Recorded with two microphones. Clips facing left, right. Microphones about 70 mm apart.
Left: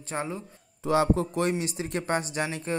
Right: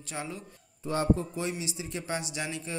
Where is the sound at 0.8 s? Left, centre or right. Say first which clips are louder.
Left 4 dB; left.